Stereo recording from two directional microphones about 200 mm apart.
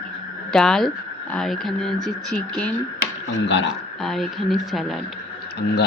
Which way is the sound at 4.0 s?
Centre (ahead or behind).